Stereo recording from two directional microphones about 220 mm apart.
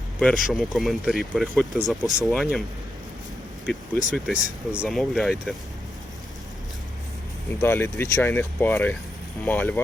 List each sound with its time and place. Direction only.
0.2 s speech: 5° left (ahead or behind)
3.7 s speech: centre (ahead or behind)
7.6 s speech: 10° left (ahead or behind)